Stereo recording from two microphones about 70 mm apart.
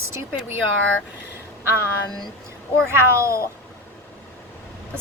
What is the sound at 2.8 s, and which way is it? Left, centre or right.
Speech, right.